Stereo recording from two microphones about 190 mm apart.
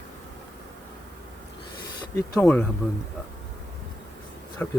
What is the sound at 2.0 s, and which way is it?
Speech, 20° left (ahead or behind).